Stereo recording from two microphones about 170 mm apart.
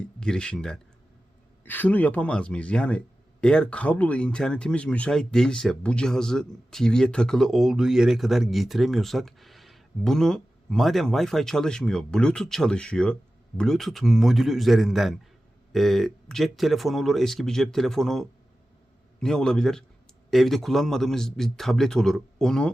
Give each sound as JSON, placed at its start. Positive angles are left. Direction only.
{"t": 0.0, "sound": "speech", "side_deg": 5}